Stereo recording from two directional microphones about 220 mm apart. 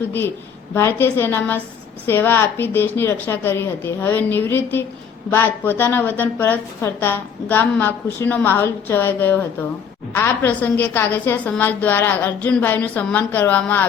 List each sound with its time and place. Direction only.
0.7 s a woman's voice: 10° left (ahead or behind)